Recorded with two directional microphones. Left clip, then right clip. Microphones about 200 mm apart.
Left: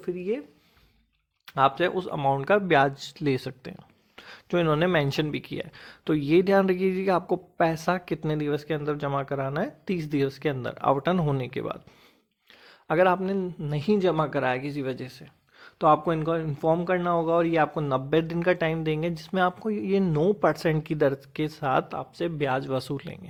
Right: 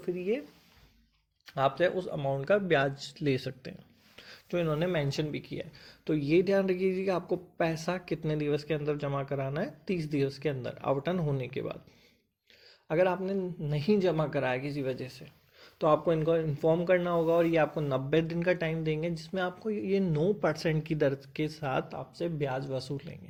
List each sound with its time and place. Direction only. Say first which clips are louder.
0.0 s speech: left 2 dB; 30° left (ahead or behind)
1.5 s a man's voice: left 5 dB; 35° left (ahead or behind)
12.9 s a man's voice: left 6 dB; 35° left (ahead or behind)